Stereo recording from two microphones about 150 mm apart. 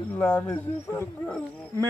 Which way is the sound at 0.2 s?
15° left (ahead or behind).